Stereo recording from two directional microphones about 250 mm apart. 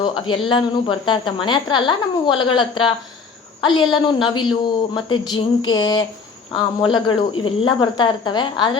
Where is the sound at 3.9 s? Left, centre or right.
Centre.